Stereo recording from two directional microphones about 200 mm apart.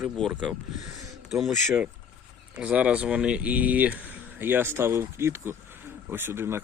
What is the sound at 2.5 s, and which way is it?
Speech, 5° right (ahead or behind).